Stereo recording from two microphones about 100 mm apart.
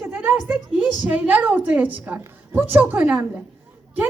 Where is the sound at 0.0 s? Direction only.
20° right (ahead or behind).